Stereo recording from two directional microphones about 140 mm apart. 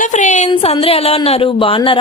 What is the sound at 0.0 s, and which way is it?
Speech, 65° left (ahead or behind).